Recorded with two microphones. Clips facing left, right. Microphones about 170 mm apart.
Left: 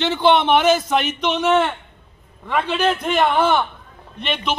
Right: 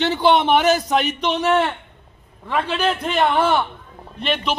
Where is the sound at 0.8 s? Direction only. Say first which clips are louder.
Even; 40° right (ahead or behind).